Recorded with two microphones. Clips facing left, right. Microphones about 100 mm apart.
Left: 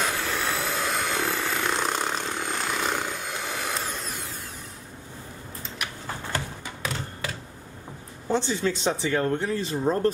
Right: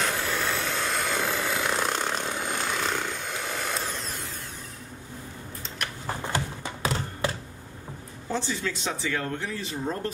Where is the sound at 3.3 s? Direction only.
Centre (ahead or behind).